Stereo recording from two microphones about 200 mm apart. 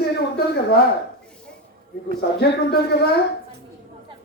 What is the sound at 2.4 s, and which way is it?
Speech, 50° left (ahead or behind).